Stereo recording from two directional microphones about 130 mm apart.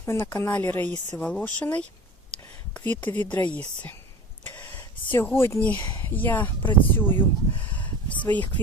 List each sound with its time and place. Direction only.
0.0 s speech: 20° left (ahead or behind)
4.4 s a sound: 15° left (ahead or behind)
5.1 s speech: 20° left (ahead or behind)